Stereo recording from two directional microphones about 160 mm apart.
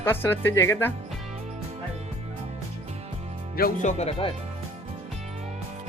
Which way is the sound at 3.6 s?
70° left (ahead or behind).